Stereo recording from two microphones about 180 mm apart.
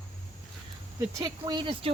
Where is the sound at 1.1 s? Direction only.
20° right (ahead or behind).